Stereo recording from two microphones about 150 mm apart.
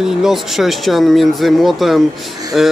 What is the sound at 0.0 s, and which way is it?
A woman's voice, centre (ahead or behind).